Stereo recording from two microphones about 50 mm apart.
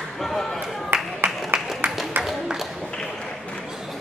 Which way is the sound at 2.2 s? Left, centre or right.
Right.